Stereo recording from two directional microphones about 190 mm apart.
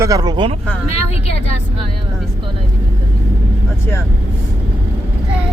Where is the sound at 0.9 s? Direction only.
35° left (ahead or behind).